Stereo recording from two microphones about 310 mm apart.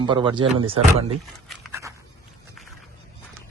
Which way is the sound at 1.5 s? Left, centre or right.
Centre.